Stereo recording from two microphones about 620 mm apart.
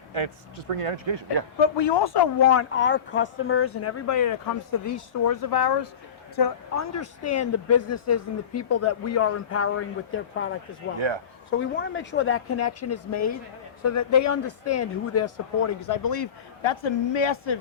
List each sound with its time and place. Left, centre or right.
0.7 s speech: right
1.5 s speech: left
2.5 s speech: centre; by 6.8 s left
6.9 s speech: left
15.8 s speech: left